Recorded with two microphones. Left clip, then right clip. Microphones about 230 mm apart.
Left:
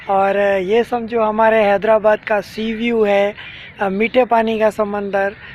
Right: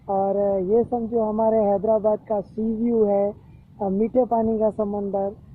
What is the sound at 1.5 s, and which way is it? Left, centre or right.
Speech, left.